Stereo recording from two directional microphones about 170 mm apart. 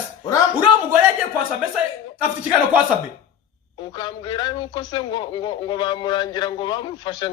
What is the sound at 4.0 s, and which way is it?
A man's voice, 25° left (ahead or behind).